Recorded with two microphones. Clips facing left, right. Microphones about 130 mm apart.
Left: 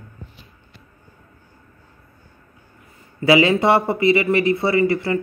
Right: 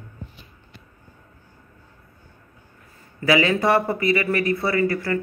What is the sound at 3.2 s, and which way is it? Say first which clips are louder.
Speech: left 4 dB; 25° left (ahead or behind).